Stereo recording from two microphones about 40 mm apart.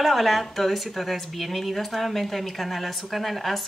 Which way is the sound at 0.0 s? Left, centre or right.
Centre.